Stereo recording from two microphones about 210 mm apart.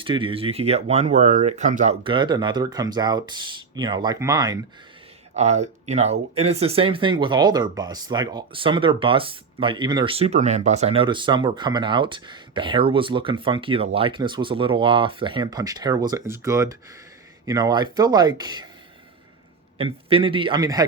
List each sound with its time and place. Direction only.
0.0 s speech: 25° right (ahead or behind)
5.3 s speech: 30° right (ahead or behind)
19.8 s speech: 25° right (ahead or behind)